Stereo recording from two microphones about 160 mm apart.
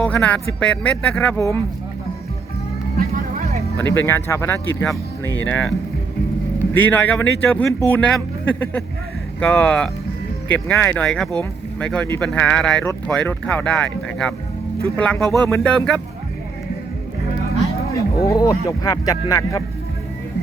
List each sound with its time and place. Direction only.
0.0 s speech: 10° left (ahead or behind)
3.0 s music: 70° right (ahead or behind)
3.8 s speech: 15° left (ahead or behind)
6.7 s speech: 10° left (ahead or behind)
18.2 s speech: 25° left (ahead or behind)